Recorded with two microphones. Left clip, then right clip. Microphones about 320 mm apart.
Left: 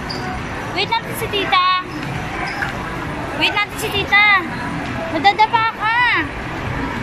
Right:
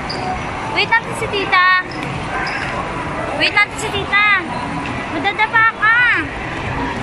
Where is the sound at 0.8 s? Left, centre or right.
Centre.